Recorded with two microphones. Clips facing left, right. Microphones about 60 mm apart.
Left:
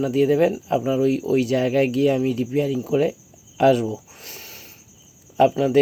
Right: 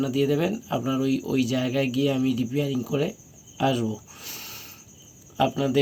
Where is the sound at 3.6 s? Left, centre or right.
Left.